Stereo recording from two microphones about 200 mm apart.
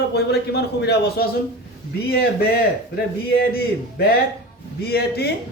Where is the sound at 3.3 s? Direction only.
50° left (ahead or behind).